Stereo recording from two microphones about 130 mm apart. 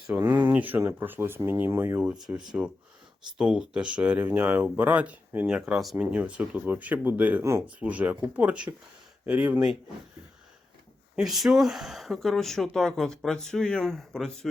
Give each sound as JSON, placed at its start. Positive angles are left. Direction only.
{"t": 0.1, "sound": "speech", "side_deg": -15}
{"t": 2.0, "sound": "speech", "side_deg": -5}
{"t": 11.2, "sound": "speech", "side_deg": 0}